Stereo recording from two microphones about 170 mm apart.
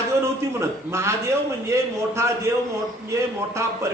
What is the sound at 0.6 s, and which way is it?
A man's voice, 15° right (ahead or behind).